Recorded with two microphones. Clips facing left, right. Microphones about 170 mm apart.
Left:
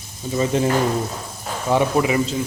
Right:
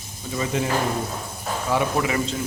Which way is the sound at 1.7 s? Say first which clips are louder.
Left 5 dB; 20° left (ahead or behind).